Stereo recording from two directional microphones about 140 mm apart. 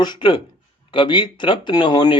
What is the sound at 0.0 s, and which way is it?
A man's voice, 35° left (ahead or behind).